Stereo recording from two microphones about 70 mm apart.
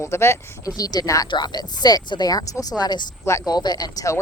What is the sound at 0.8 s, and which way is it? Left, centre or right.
Speech, left.